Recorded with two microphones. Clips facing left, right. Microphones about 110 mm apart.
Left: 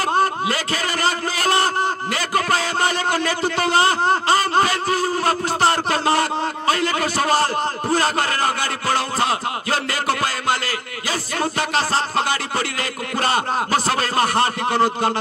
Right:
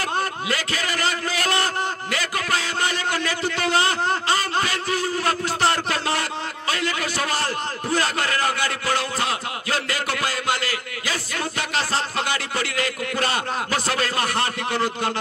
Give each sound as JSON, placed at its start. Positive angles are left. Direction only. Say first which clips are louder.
{"t": 0.1, "sound": "a sound", "louder": "left 6 dB", "side_deg": 35}
{"t": 7.9, "sound": "a man's voice", "louder": "left 3 dB", "side_deg": 35}
{"t": 8.8, "sound": "music", "louder": "left 6 dB", "side_deg": 35}